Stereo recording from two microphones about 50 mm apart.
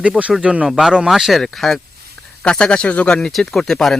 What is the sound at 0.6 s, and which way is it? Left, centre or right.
Speech, centre.